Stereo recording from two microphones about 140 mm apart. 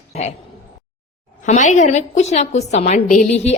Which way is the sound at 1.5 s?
60° left (ahead or behind).